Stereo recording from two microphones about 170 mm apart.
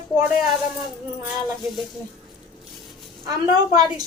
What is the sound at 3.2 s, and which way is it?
Child singing, 25° right (ahead or behind).